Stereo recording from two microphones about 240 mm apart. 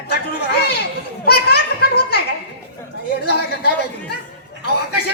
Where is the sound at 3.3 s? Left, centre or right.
Left.